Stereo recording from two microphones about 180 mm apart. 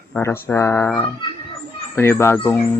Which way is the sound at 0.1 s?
15° left (ahead or behind).